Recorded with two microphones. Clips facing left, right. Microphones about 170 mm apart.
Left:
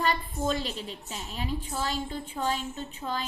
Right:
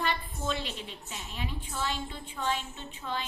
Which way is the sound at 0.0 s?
40° left (ahead or behind).